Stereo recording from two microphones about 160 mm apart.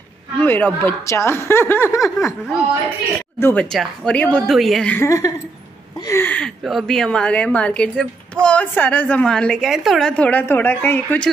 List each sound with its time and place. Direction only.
0.4 s a woman's voice: 10° left (ahead or behind)
3.3 s a woman's voice: 15° left (ahead or behind)
3.6 s a woman's voice: 5° left (ahead or behind)
4.9 s a woman's voice: 20° left (ahead or behind)
5.9 s a sound: 20° left (ahead or behind)
6.6 s a woman's voice: centre (ahead or behind)